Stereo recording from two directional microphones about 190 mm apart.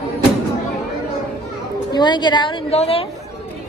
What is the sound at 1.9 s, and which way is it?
A woman's voice, 20° left (ahead or behind).